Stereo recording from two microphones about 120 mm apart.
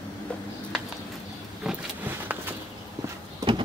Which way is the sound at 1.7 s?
5° right (ahead or behind).